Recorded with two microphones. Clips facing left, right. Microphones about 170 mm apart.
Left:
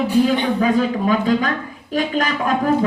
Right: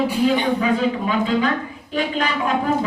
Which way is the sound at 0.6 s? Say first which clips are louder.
Left 3 dB; 45° left (ahead or behind).